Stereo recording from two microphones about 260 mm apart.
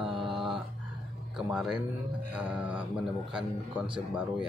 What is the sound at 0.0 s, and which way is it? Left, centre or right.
Mantra, centre.